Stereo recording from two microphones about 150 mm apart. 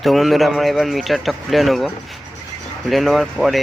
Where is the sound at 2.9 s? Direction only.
Centre (ahead or behind).